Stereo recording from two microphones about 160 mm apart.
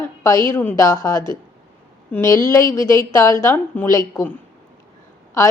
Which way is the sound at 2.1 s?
20° left (ahead or behind).